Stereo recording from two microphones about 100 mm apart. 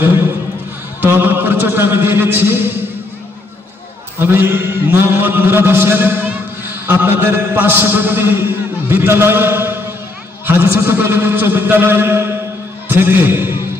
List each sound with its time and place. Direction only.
0.0 s a man's voice: 20° right (ahead or behind)
4.2 s a man's voice: 20° right (ahead or behind)